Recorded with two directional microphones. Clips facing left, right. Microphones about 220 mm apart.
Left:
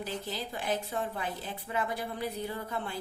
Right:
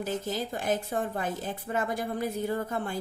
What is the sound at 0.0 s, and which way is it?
A woman's voice, 45° right (ahead or behind).